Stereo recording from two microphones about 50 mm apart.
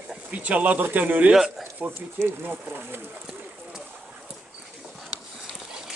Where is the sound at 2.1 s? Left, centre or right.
Right.